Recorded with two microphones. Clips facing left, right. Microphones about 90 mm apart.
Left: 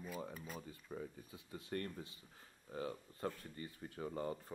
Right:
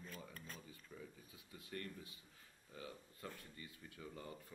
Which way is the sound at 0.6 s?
45° left (ahead or behind).